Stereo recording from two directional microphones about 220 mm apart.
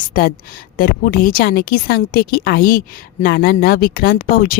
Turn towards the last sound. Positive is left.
turn(degrees=40)  # may be behind; listen again after turning